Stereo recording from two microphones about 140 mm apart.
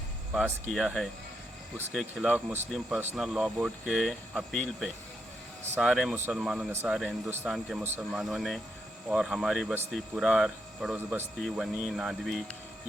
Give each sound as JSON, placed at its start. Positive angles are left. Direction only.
{"t": 0.7, "sound": "speech", "side_deg": 0}
{"t": 7.3, "sound": "speech", "side_deg": -15}
{"t": 7.5, "sound": "speech", "side_deg": 0}
{"t": 7.9, "sound": "speech", "side_deg": -15}
{"t": 8.2, "sound": "speech", "side_deg": 0}